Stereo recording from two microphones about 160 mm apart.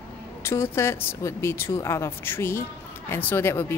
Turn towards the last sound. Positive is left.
turn(degrees=15)  # may be behind; listen again after turning